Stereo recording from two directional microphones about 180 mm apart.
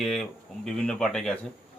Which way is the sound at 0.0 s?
5° left (ahead or behind).